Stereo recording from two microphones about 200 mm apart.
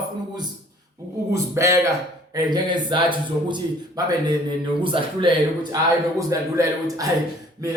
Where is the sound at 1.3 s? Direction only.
15° right (ahead or behind).